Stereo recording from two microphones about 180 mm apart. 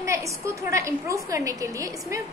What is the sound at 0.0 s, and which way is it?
A woman's voice, 15° right (ahead or behind).